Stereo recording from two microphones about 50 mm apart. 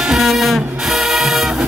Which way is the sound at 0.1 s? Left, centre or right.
Centre.